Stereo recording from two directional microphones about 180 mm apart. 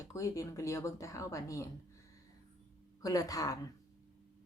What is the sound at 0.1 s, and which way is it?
Speech, 15° left (ahead or behind).